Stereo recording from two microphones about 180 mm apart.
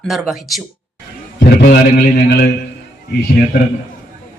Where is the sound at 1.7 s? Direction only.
60° left (ahead or behind).